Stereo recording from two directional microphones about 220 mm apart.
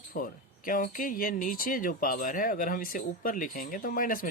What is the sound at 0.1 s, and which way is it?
Speech, 40° left (ahead or behind).